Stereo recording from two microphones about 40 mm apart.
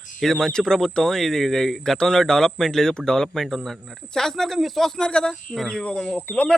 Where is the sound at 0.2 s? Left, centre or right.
Centre.